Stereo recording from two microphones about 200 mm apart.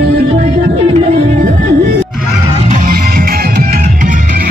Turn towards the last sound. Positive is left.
turn(degrees=-45)  # may be behind; listen again after turning